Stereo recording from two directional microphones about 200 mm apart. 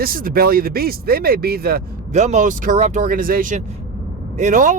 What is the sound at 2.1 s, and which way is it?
Speech, 35° right (ahead or behind).